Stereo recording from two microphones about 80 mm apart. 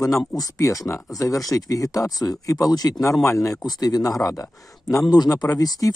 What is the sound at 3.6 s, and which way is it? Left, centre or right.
Speech, left.